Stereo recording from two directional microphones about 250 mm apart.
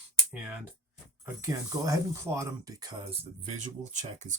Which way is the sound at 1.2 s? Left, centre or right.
Centre.